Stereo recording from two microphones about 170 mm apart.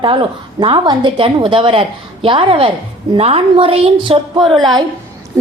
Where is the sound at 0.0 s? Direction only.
30° right (ahead or behind).